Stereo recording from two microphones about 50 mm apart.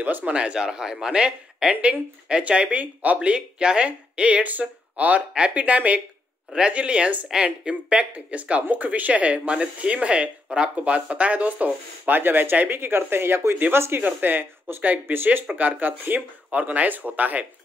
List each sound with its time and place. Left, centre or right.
0.0 s speech: right
0.3 s speech: right
5.3 s speech: right
14.0 s speech: right